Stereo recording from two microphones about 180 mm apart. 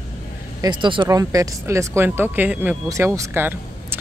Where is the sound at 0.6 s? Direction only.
25° right (ahead or behind).